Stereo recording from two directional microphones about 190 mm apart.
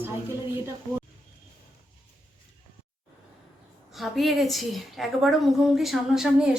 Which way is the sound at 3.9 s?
Centre (ahead or behind).